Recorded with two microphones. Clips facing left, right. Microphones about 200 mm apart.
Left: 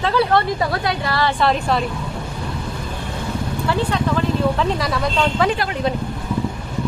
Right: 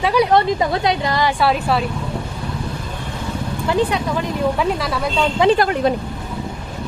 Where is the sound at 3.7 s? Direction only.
15° right (ahead or behind).